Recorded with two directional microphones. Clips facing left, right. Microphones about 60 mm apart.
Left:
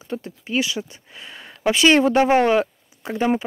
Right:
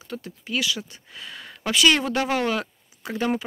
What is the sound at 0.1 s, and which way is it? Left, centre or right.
Speech, left.